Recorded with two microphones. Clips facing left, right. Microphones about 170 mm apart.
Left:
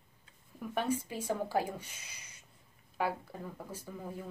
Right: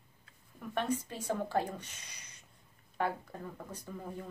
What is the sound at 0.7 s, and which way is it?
A woman's voice, 5° left (ahead or behind).